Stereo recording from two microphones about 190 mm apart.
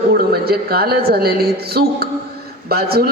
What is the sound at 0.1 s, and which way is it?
A woman's voice, 55° right (ahead or behind).